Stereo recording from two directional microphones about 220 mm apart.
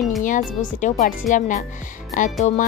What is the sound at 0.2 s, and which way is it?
Speech, 35° left (ahead or behind).